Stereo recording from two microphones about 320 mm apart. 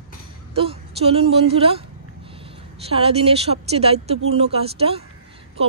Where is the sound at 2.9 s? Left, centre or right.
Centre.